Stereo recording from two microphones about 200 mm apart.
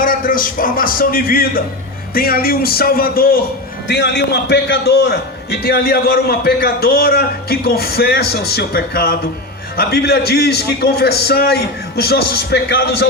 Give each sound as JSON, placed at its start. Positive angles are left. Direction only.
{"t": 0.0, "sound": "a man's voice", "side_deg": 45}